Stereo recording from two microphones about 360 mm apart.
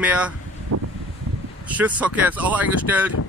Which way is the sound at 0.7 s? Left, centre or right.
Right.